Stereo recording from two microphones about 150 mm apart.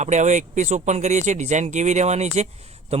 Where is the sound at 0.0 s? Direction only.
50° right (ahead or behind).